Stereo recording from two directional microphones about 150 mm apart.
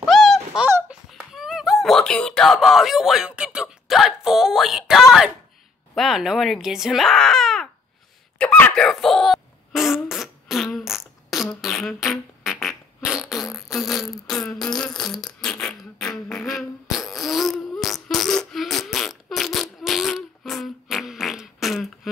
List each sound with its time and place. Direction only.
0.0 s dog: centre (ahead or behind)
0.7 s a sound: 15° right (ahead or behind)
1.3 s speech: centre (ahead or behind)
8.4 s fart: 10° left (ahead or behind)
16.0 s beatboxing: 5° left (ahead or behind)